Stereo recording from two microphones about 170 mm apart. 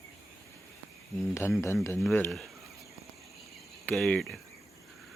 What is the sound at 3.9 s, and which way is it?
Cricket, 5° left (ahead or behind).